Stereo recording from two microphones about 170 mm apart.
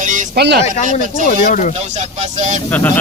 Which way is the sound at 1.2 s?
50° left (ahead or behind).